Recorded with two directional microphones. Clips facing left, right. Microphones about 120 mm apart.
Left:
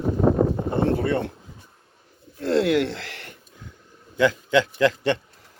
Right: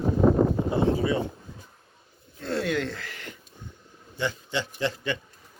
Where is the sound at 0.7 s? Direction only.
60° left (ahead or behind).